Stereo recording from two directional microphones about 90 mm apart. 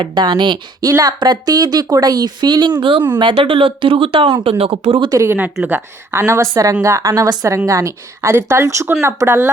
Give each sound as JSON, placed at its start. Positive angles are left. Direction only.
{"t": 0.0, "sound": "speech", "side_deg": -60}
{"t": 0.8, "sound": "a woman's voice", "side_deg": -40}
{"t": 5.1, "sound": "a woman's voice", "side_deg": -30}